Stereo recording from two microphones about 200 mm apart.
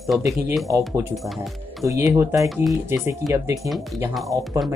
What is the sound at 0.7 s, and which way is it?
Speech, 15° right (ahead or behind).